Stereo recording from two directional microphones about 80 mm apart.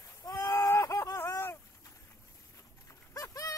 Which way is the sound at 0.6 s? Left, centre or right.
Left.